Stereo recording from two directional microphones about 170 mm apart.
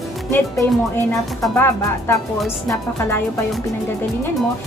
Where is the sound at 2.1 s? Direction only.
10° left (ahead or behind).